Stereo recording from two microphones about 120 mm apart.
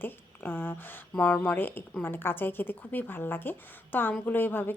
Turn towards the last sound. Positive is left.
turn(degrees=15)  # may be behind; listen again after turning